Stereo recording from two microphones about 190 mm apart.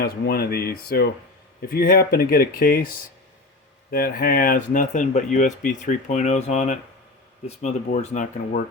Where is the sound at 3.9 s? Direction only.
50° left (ahead or behind).